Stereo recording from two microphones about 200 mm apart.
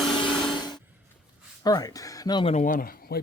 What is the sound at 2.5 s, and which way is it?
Speech, 40° left (ahead or behind).